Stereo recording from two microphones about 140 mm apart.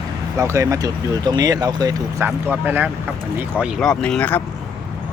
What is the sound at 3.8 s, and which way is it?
Speech, 5° left (ahead or behind).